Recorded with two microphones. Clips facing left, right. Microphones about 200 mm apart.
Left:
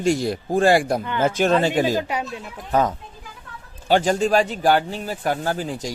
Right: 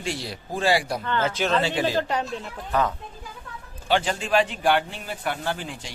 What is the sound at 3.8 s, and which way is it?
Speech, 40° left (ahead or behind).